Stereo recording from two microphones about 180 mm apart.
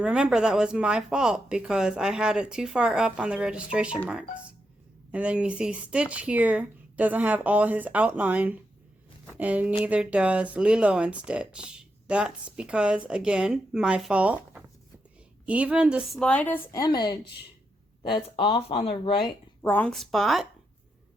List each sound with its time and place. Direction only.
0.0 s speech: 5° right (ahead or behind); by 17.2 s 25° left (ahead or behind)
18.3 s speech: 30° left (ahead or behind)
19.6 s speech: 10° left (ahead or behind)